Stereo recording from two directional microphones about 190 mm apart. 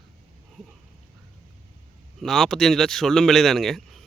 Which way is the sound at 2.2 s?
Centre (ahead or behind).